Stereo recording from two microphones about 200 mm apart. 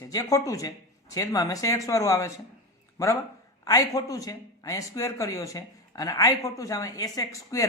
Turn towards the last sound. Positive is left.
turn(degrees=15)  # may be behind; listen again after turning